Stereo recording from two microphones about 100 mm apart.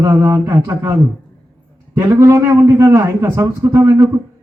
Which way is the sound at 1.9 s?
30° right (ahead or behind).